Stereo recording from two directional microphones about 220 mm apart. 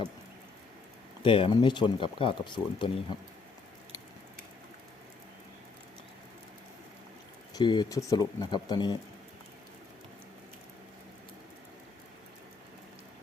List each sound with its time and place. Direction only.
1.2 s speech: 25° left (ahead or behind)
7.5 s speech: 20° left (ahead or behind)